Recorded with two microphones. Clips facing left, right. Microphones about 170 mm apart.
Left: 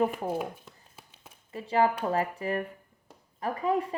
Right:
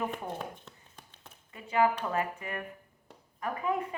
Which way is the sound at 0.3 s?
10° left (ahead or behind).